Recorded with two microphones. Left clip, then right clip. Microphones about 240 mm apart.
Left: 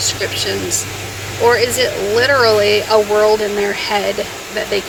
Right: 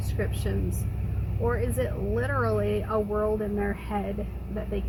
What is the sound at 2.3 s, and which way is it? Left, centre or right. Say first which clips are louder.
Speech: left 16 dB; centre.